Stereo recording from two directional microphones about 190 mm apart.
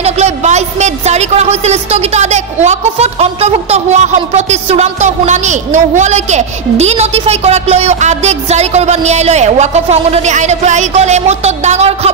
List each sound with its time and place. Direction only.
0.0 s a woman's voice: 35° right (ahead or behind)